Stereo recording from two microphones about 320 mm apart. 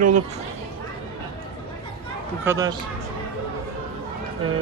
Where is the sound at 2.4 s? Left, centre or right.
Centre.